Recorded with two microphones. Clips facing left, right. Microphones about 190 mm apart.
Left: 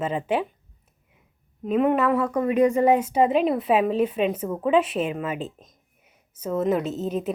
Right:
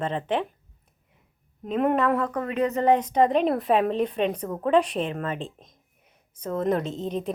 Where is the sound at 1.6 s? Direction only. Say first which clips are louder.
Left 2 dB; 5° left (ahead or behind).